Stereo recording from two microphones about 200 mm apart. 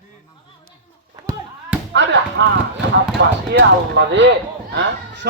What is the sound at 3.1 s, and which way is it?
Speech, 55° right (ahead or behind).